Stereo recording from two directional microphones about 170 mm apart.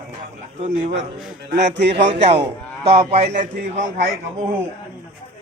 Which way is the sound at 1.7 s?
90° right.